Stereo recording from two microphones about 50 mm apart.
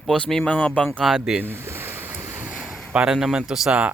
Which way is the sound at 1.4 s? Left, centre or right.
Right.